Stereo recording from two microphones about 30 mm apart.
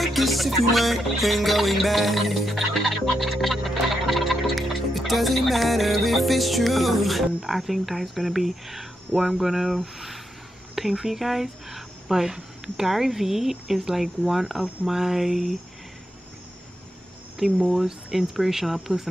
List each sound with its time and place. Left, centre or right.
0.0 s music: centre
10.7 s speech: centre
17.4 s speech: centre